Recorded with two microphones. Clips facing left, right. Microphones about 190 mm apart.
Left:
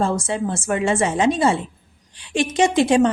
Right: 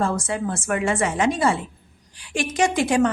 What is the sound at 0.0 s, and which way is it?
A woman's voice, 25° left (ahead or behind).